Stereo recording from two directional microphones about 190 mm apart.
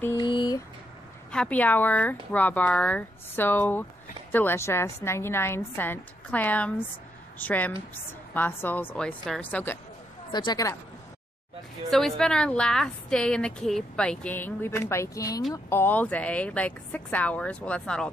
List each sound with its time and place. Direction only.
0.2 s a sound: 25° left (ahead or behind)
1.3 s speech: 5° left (ahead or behind)
10.3 s speech: 20° left (ahead or behind)
11.9 s a woman's voice: centre (ahead or behind)